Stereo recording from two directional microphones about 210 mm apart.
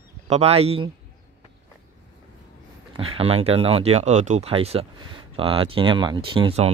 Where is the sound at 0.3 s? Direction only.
30° right (ahead or behind).